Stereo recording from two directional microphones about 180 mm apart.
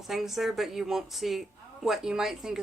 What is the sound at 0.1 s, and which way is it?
A woman's voice, centre (ahead or behind).